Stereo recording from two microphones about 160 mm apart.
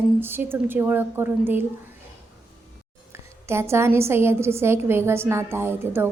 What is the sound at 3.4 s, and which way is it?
A woman's voice, 15° right (ahead or behind).